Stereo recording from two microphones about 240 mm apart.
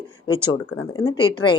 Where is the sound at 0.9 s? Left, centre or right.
Centre.